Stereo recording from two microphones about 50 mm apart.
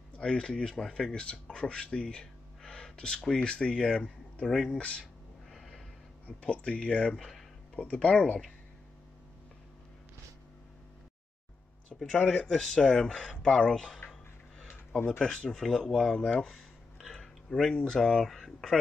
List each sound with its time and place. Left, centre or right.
0.2 s speech: centre
6.2 s speech: left
12.1 s speech: centre
15.0 s speech: centre
16.4 s a sound: centre
17.8 s speech: centre